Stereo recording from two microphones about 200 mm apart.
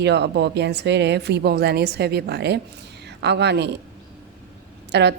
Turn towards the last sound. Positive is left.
turn(degrees=-55)  # may be behind; listen again after turning